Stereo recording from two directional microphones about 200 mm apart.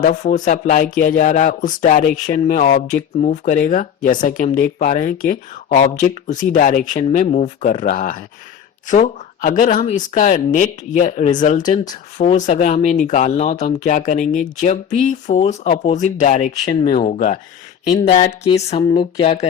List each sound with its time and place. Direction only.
0.0 s speech: 40° left (ahead or behind)